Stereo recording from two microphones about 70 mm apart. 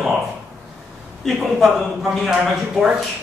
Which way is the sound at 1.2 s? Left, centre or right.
Centre.